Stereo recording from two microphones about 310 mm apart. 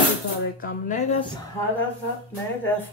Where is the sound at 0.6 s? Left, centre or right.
Left.